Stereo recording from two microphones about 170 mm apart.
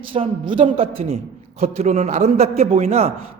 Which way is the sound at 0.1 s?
30° right (ahead or behind).